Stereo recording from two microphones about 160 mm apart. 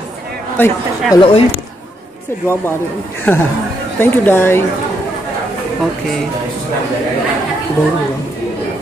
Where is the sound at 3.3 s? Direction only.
10° left (ahead or behind).